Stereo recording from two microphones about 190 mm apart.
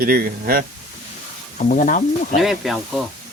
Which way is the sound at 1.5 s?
40° left (ahead or behind).